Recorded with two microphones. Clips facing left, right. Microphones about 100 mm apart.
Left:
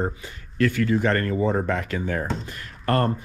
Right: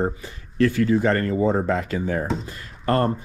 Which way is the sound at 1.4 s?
40° right (ahead or behind).